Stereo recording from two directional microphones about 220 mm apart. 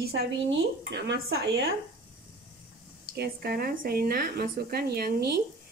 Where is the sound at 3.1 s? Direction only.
45° right (ahead or behind).